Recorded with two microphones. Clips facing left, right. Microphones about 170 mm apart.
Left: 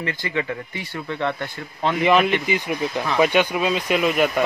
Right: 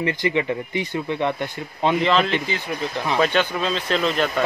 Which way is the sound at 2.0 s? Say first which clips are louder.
Left 5 dB; 15° left (ahead or behind).